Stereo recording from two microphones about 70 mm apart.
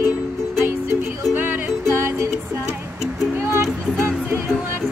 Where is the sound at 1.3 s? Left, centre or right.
Right.